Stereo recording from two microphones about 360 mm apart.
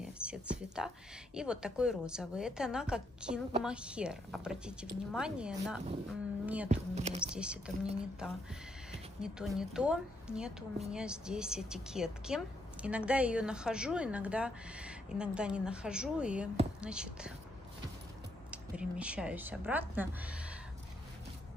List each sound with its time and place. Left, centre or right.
0.0 s a sound: centre
1.3 s a woman's voice: centre
6.7 s speech: centre
7.3 s a woman's voice: centre
18.5 s a woman's voice: centre